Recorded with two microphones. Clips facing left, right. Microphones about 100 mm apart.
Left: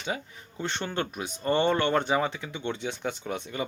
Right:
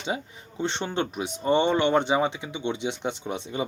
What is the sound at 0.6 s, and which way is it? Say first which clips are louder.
Speech: right 3 dB; 25° right (ahead or behind).